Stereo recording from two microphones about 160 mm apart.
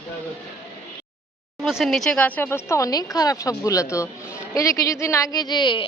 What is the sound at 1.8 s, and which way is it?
Speech, centre (ahead or behind).